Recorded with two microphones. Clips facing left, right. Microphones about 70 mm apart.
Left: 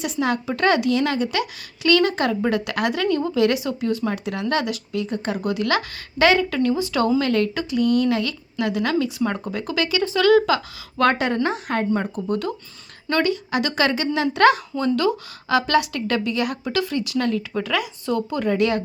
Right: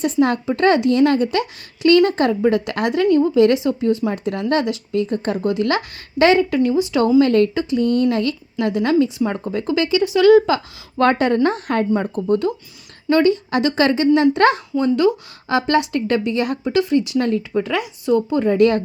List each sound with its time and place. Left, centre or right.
0.0 s a woman's voice: right
12.1 s a woman's voice: right
18.5 s speech: right